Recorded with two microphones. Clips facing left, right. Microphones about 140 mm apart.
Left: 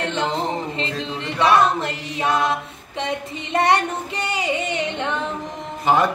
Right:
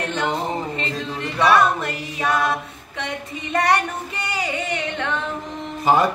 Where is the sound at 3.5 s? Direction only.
25° left (ahead or behind).